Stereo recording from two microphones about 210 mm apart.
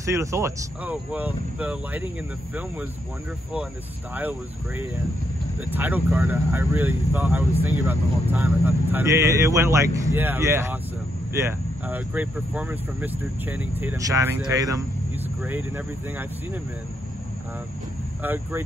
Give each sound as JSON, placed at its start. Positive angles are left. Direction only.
{"t": 0.0, "sound": "speech", "side_deg": -15}
{"t": 4.1, "sound": "speech", "side_deg": -10}
{"t": 18.2, "sound": "speech", "side_deg": -10}